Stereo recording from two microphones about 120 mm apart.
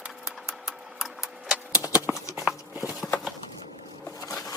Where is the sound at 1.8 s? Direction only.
15° right (ahead or behind).